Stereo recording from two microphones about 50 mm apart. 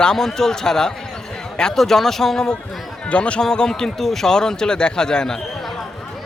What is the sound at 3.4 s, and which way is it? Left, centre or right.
Speech, centre.